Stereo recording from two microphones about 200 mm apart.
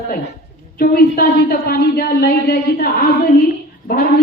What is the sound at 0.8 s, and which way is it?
A woman's voice, 50° left (ahead or behind).